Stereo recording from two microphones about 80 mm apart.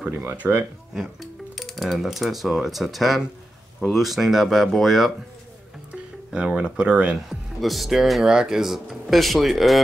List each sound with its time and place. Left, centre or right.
0.1 s speech: right
0.9 s speech: centre
6.3 s speech: centre
7.2 s speech: centre